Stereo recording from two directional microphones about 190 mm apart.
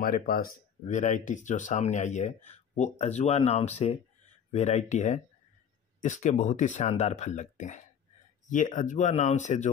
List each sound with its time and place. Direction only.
0.0 s speech: 50° left (ahead or behind)